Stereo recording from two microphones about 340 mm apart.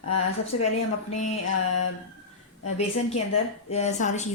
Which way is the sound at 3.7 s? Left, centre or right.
Centre.